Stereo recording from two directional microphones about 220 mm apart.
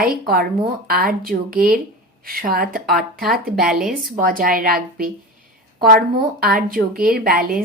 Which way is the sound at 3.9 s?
40° right (ahead or behind).